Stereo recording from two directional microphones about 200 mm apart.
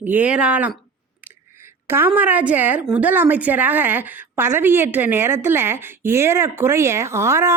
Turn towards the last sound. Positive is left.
turn(degrees=-15)  # may be behind; listen again after turning